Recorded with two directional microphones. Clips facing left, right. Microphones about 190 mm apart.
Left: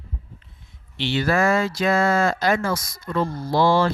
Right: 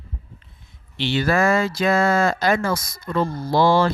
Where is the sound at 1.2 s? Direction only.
50° right (ahead or behind).